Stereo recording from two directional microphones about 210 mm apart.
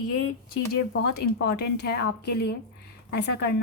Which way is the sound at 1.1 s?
50° left (ahead or behind).